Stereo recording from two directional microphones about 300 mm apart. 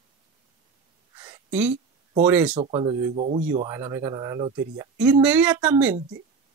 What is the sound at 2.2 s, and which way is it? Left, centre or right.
Speech, centre.